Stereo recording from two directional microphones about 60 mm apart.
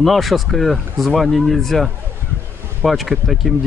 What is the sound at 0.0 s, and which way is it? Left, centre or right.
Speech, centre.